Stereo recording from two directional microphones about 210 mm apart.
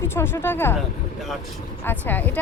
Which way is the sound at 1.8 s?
10° left (ahead or behind).